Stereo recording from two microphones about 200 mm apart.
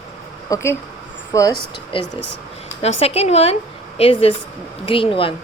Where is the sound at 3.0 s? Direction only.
30° left (ahead or behind).